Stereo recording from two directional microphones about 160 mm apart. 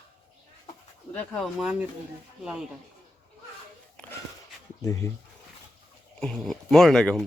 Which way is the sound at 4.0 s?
5° left (ahead or behind).